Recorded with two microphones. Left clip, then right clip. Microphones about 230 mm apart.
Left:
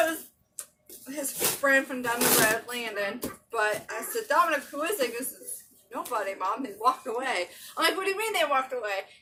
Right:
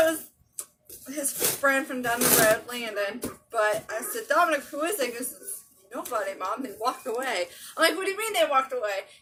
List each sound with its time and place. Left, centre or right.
1.1 s speech: centre